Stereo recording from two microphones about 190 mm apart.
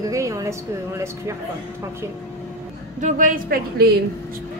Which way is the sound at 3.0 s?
45° right (ahead or behind).